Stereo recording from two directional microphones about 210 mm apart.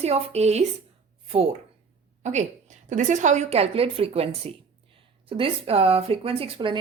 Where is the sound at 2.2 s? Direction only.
35° right (ahead or behind).